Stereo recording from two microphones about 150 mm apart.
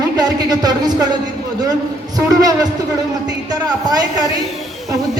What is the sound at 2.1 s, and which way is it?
Speech, 25° right (ahead or behind).